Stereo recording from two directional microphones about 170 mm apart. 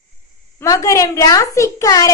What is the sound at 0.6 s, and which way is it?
A woman's voice, 20° left (ahead or behind).